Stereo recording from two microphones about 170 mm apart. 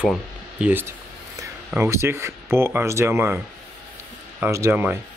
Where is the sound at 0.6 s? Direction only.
10° right (ahead or behind).